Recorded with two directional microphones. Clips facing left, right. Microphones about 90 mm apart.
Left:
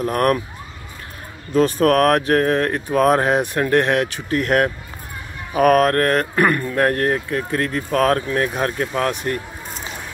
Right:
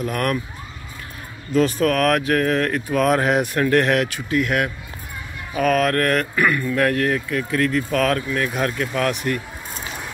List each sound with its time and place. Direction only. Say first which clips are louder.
0.0 s speech: left 5 dB; 40° left (ahead or behind)
1.5 s speech: left 3 dB; 40° left (ahead or behind)
4.3 s speech: left 4 dB; 45° left (ahead or behind)
5.6 s mantra: left 5 dB; 50° left (ahead or behind)
5.9 s speech: left 2 dB; 35° left (ahead or behind)
6.3 s speech: left 2 dB; 45° left (ahead or behind); by 9.1 s 25° left (ahead or behind)